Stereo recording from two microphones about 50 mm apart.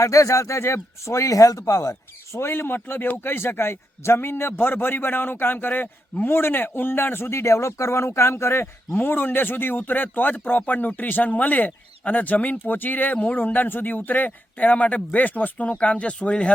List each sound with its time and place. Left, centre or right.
0.0 s speech: left
2.3 s a man's voice: left
9.0 s speech: left